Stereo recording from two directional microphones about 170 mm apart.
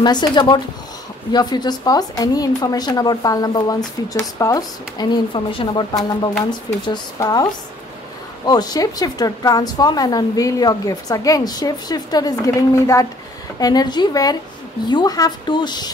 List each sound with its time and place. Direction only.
0.0 s a woman's voice: 25° left (ahead or behind)